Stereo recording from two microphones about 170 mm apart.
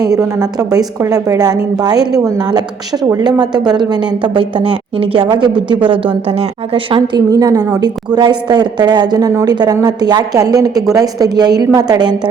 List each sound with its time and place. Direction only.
0.0 s speech: 20° right (ahead or behind)